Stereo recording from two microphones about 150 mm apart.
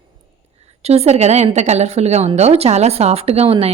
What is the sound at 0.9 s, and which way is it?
Speech, 45° right (ahead or behind).